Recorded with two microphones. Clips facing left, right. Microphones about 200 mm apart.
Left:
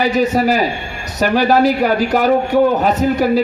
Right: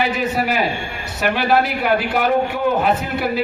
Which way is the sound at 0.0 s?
40° left (ahead or behind).